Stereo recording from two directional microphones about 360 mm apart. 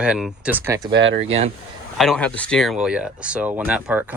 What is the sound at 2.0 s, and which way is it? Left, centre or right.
Speech, centre.